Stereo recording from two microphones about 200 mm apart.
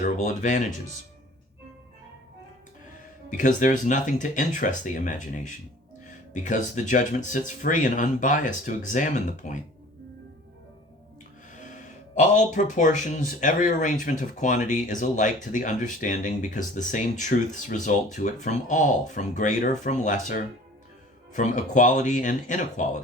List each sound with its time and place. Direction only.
0.0 s speech: 40° left (ahead or behind)
3.2 s speech: 40° left (ahead or behind)
11.5 s speech: 40° left (ahead or behind)